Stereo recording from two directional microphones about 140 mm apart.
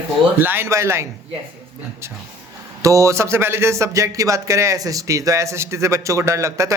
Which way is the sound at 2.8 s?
20° right (ahead or behind).